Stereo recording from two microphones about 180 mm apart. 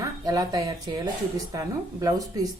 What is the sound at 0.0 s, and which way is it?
A woman's voice, 20° right (ahead or behind).